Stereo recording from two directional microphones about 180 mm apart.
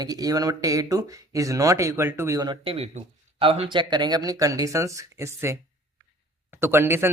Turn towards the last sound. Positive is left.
turn(degrees=-15)  # may be behind; listen again after turning